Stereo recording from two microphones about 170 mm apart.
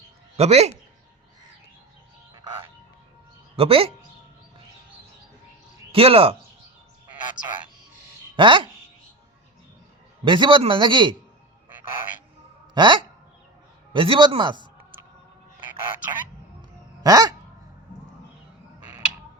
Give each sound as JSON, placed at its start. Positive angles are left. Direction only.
{"t": 0.3, "sound": "speech", "side_deg": -40}
{"t": 3.5, "sound": "speech", "side_deg": -35}
{"t": 5.9, "sound": "speech", "side_deg": -35}
{"t": 8.4, "sound": "a man's voice", "side_deg": -30}
{"t": 10.2, "sound": "a man's voice", "side_deg": -30}
{"t": 12.7, "sound": "a man's voice", "side_deg": -25}
{"t": 17.0, "sound": "dog", "side_deg": -20}